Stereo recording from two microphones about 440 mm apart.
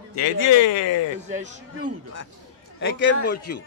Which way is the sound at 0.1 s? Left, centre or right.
Left.